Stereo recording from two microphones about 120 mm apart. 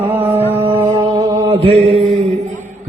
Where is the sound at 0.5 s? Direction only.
20° right (ahead or behind).